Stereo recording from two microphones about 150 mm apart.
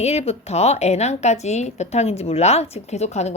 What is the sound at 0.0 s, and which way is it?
A woman's voice, 45° left (ahead or behind).